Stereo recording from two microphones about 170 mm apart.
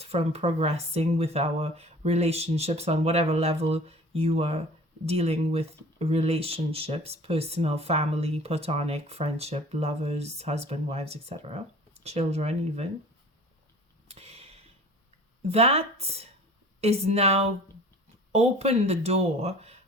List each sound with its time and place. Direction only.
0.0 s speech: 35° right (ahead or behind)
14.1 s a sound: 35° right (ahead or behind)
15.4 s speech: 35° right (ahead or behind)